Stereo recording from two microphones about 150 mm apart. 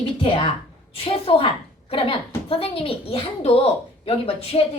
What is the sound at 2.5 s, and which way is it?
A woman's voice, 35° left (ahead or behind).